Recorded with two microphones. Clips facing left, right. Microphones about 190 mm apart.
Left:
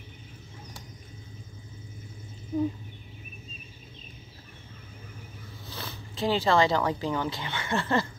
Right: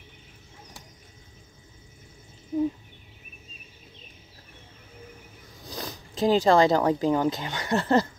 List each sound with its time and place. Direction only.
5.7 s speech: 40° right (ahead or behind)